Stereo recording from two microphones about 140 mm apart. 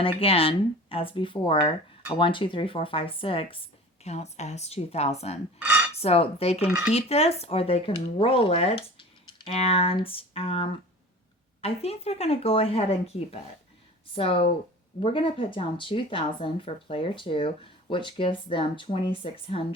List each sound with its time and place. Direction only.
0.0 s speech: 45° left (ahead or behind)
4.0 s speech: 50° left (ahead or behind)
5.5 s dishes: 10° right (ahead or behind)
6.0 s speech: 45° left (ahead or behind)